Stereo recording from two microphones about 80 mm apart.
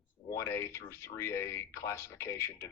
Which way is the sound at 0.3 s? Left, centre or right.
Left.